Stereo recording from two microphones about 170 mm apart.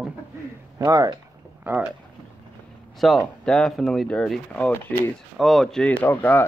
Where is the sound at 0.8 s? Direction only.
20° right (ahead or behind).